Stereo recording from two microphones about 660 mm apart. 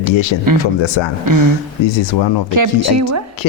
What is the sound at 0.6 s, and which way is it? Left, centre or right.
A man's voice, left.